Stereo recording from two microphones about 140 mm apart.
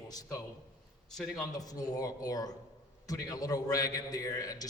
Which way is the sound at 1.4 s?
25° left (ahead or behind).